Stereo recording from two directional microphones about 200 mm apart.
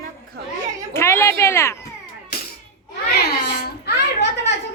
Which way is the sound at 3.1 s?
50° left (ahead or behind).